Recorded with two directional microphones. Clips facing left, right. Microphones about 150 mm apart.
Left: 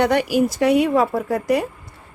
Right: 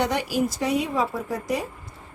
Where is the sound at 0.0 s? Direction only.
65° left (ahead or behind).